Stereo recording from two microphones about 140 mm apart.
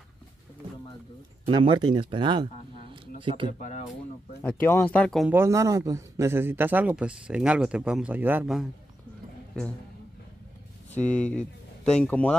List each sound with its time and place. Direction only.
1.4 s speech: 35° right (ahead or behind)
4.4 s speech: 15° left (ahead or behind)
5.3 s speech: 20° right (ahead or behind)
10.9 s speech: 10° left (ahead or behind)